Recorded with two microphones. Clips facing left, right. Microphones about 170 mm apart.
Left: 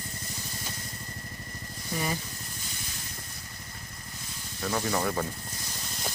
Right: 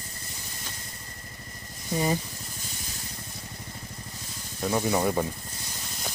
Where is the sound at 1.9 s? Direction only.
30° right (ahead or behind).